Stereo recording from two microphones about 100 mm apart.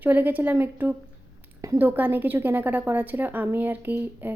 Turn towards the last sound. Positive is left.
turn(degrees=-20)  # may be behind; listen again after turning